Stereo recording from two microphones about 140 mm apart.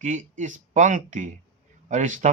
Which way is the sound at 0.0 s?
60° right (ahead or behind).